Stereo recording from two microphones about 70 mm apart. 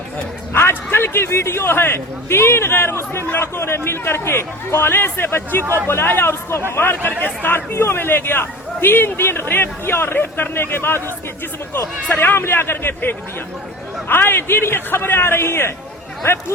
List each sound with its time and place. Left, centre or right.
0.5 s a man's voice: left